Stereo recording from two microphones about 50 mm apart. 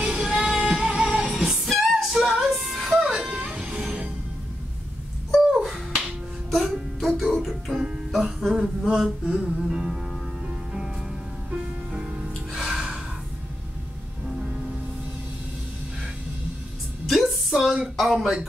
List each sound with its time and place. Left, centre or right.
0.0 s music: centre
5.5 s finger snapping: centre
6.5 s music: centre
8.5 s a sound: centre
9.4 s music: centre
11.5 s music: centre
14.2 s music: centre
17.1 s music: centre
17.9 s speech: centre